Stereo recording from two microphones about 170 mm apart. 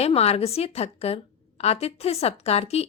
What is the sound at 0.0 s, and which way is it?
Speech, 35° left (ahead or behind).